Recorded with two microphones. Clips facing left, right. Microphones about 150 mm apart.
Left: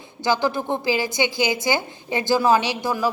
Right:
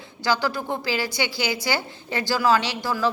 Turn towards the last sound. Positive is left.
turn(degrees=20)  # may be behind; listen again after turning